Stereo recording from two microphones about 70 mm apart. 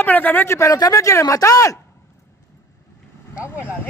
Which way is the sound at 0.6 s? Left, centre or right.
Left.